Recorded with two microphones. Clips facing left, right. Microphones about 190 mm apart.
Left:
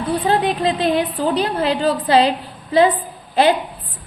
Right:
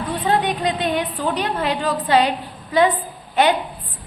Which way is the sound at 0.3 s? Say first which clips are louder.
Left 1 dB; 30° left (ahead or behind).